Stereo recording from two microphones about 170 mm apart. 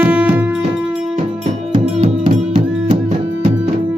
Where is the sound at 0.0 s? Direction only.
10° right (ahead or behind).